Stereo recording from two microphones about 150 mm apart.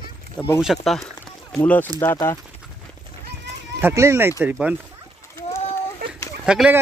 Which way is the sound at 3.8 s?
20° right (ahead or behind).